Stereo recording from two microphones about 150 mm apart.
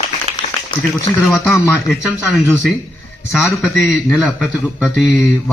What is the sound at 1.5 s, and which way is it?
Speech, 20° left (ahead or behind).